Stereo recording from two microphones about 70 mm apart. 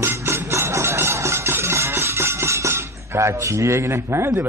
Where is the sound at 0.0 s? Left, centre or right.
Right.